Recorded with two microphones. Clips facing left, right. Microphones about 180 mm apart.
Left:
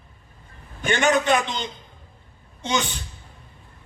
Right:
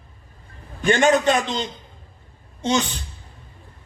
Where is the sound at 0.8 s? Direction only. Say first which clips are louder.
Right 4 dB; 35° right (ahead or behind).